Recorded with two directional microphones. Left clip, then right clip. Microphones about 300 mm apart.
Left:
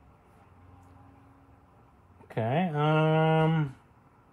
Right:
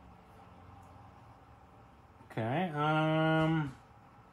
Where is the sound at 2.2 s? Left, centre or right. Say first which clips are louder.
Left 5 dB; left.